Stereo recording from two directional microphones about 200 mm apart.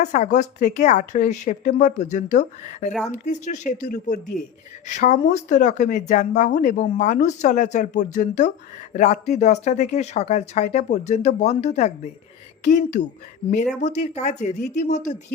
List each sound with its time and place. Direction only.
0.0 s speech: 35° left (ahead or behind)